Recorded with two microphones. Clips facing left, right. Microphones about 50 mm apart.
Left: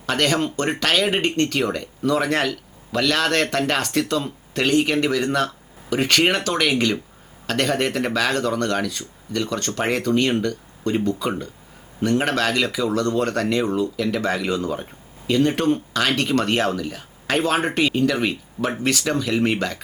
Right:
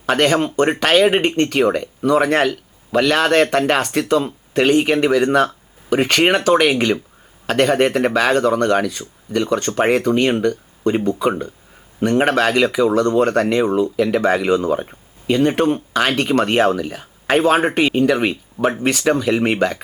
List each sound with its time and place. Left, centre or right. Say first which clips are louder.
0.0 s speech: right 5 dB; right